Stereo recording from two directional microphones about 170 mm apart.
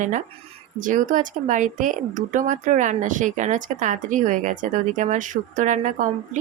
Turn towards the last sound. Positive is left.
turn(degrees=-50)  # may be behind; listen again after turning